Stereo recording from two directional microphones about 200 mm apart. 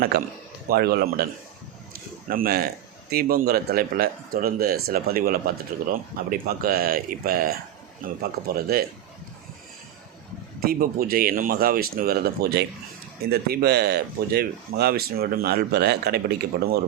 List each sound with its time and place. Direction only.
0.1 s speech: 50° right (ahead or behind)
2.2 s speech: 45° right (ahead or behind)
10.6 s speech: 45° right (ahead or behind)